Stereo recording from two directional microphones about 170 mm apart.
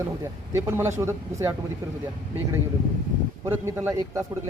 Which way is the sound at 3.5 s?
15° right (ahead or behind).